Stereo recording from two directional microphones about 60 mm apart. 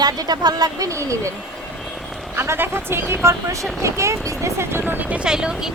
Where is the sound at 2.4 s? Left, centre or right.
Right.